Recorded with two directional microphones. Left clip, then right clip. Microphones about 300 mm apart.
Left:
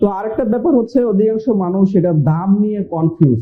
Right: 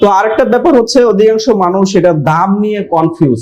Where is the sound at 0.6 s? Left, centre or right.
Centre.